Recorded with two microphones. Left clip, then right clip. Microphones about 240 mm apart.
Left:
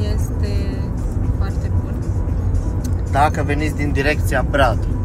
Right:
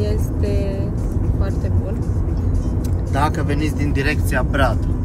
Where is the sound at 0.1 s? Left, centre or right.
Centre.